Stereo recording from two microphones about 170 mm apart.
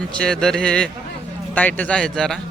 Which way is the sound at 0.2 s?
5° left (ahead or behind).